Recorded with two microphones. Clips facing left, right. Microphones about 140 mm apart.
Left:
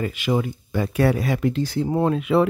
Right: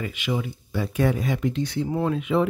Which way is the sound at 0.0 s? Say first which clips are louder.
Left 5 dB; 40° left (ahead or behind).